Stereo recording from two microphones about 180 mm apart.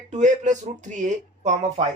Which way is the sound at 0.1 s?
40° right (ahead or behind).